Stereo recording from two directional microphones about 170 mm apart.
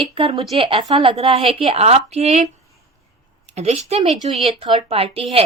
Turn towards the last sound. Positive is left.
turn(degrees=-35)  # may be behind; listen again after turning